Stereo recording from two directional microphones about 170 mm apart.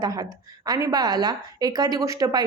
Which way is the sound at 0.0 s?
20° right (ahead or behind).